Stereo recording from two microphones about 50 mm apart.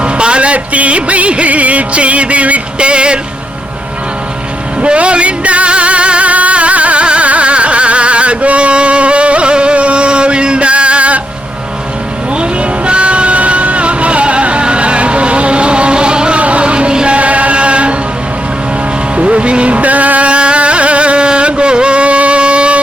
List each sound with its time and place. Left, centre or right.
0.0 s music: right
4.8 s music: right
12.4 s music: right
19.1 s music: right